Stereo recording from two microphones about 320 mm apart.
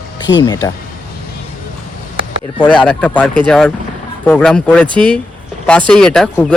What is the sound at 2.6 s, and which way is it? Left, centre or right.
Speech, centre.